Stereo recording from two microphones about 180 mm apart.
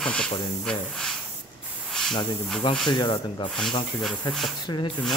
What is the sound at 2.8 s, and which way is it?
Speech, 25° left (ahead or behind).